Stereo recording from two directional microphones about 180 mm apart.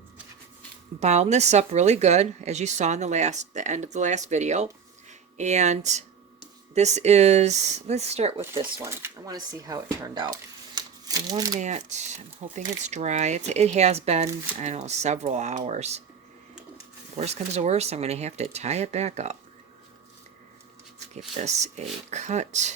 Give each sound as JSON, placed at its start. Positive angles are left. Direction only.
{"t": 0.9, "sound": "a woman's voice", "side_deg": -40}
{"t": 8.8, "sound": "speech", "side_deg": -15}
{"t": 11.6, "sound": "a woman's voice", "side_deg": -40}
{"t": 17.2, "sound": "a woman's voice", "side_deg": -35}
{"t": 21.4, "sound": "a woman's voice", "side_deg": -40}